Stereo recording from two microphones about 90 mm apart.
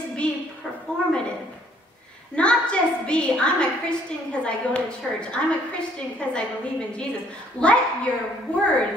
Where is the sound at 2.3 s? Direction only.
10° left (ahead or behind).